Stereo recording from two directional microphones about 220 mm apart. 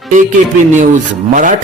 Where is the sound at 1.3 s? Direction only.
35° right (ahead or behind).